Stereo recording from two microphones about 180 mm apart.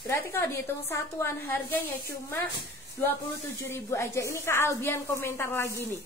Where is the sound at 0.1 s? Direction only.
15° left (ahead or behind).